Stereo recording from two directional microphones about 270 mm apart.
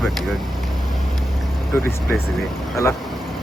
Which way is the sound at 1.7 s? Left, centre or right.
Centre.